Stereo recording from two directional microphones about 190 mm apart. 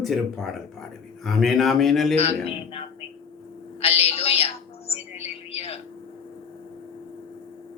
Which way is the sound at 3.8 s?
30° left (ahead or behind).